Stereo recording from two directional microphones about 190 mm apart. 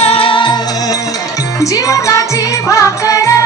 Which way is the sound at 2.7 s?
15° left (ahead or behind).